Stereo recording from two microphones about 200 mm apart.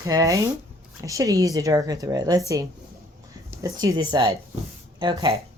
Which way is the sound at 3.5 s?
15° right (ahead or behind).